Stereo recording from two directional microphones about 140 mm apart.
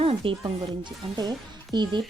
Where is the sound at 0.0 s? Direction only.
40° right (ahead or behind).